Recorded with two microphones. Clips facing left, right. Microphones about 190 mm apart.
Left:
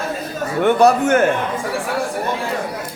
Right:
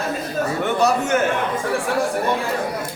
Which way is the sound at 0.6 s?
55° left (ahead or behind).